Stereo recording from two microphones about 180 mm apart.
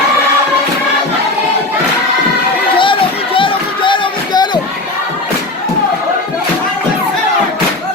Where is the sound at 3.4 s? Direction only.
30° left (ahead or behind).